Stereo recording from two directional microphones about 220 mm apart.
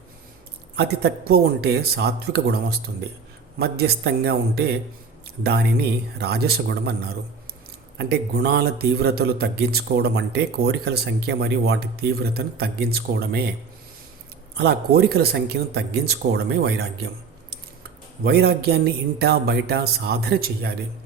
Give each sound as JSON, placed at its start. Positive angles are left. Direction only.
{"t": 0.8, "sound": "a man's voice", "side_deg": -45}
{"t": 14.5, "sound": "a man's voice", "side_deg": -50}
{"t": 18.2, "sound": "a man's voice", "side_deg": -45}